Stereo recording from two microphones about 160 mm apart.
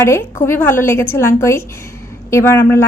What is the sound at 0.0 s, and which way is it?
A woman's voice, 15° left (ahead or behind).